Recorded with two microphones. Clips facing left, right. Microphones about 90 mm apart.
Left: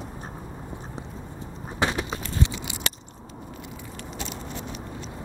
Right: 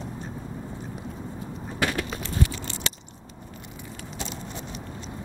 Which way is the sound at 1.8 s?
20° left (ahead or behind).